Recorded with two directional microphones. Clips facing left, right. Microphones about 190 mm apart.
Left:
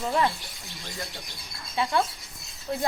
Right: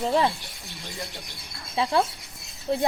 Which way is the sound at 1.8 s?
35° right (ahead or behind).